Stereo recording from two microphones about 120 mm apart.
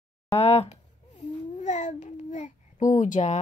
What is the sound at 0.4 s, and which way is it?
Babbling, 60° left (ahead or behind).